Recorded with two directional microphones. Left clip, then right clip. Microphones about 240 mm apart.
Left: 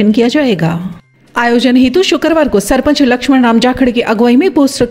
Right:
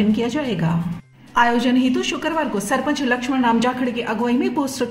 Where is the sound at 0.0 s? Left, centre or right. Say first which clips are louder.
Left 11 dB; left.